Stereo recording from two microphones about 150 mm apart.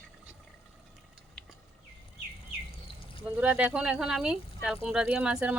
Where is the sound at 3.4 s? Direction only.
10° right (ahead or behind).